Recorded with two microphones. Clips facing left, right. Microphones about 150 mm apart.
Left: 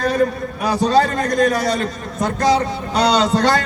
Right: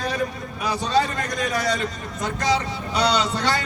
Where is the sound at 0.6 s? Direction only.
40° left (ahead or behind).